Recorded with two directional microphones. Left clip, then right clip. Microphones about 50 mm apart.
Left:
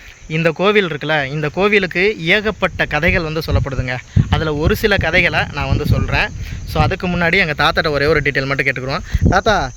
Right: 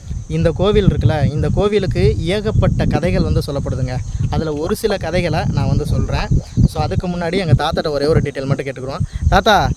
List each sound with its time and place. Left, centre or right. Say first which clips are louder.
0.3 s speech: left 2 dB; centre
8.2 s speech: left 6 dB; centre
8.4 s speech: left 6 dB; right
8.9 s speech: left 1 dB; right